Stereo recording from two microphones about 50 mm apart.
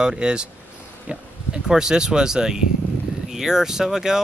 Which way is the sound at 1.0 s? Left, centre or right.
Centre.